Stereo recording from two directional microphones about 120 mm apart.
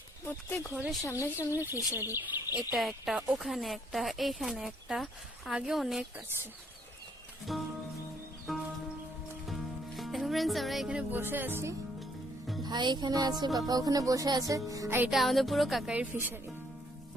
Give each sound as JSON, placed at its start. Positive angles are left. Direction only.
{"t": 0.3, "sound": "speech", "side_deg": 20}
{"t": 1.5, "sound": "speech", "side_deg": -20}
{"t": 2.7, "sound": "speech", "side_deg": 0}
{"t": 7.5, "sound": "music", "side_deg": 0}
{"t": 11.2, "sound": "speech", "side_deg": -15}
{"t": 12.6, "sound": "music", "side_deg": -35}
{"t": 13.6, "sound": "speech", "side_deg": -30}
{"t": 15.1, "sound": "speech", "side_deg": 0}
{"t": 16.0, "sound": "speech", "side_deg": -15}